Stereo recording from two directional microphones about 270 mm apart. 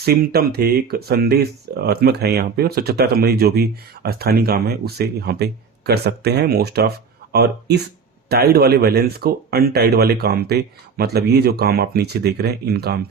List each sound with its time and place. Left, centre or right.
0.0 s speech: right